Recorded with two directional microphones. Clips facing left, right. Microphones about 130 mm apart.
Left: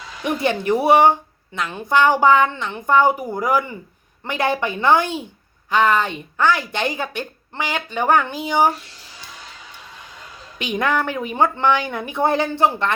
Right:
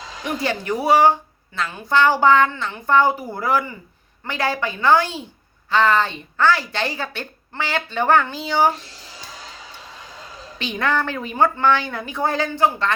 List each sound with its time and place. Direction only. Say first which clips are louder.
0.4 s a woman's voice: left 4 dB; 25° left (ahead or behind)
10.6 s a woman's voice: left 1 dB; 15° left (ahead or behind)